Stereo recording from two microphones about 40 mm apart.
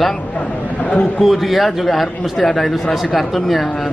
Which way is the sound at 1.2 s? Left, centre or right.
Centre.